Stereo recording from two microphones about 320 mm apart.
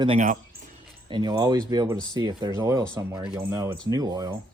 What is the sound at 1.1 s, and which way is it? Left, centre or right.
Speech, centre.